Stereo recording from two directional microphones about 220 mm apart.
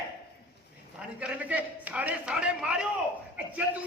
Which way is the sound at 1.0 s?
5° right (ahead or behind).